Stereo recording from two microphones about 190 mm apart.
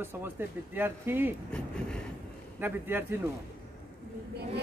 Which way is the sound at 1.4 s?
5° left (ahead or behind).